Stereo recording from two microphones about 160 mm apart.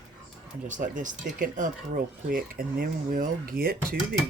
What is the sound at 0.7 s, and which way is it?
Speech, 55° right (ahead or behind).